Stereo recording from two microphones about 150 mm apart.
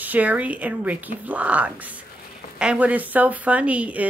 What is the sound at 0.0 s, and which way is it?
Speech, 10° right (ahead or behind).